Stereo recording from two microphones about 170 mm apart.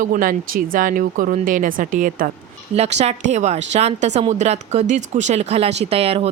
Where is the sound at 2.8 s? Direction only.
40° right (ahead or behind).